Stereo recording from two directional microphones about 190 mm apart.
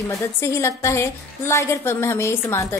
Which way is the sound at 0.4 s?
15° left (ahead or behind).